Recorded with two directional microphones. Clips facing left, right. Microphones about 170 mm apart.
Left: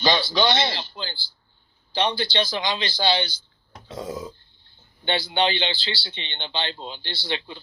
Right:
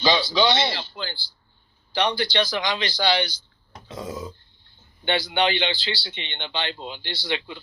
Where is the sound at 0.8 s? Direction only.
25° left (ahead or behind).